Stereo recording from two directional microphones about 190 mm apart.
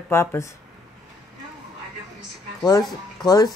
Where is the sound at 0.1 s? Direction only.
15° left (ahead or behind).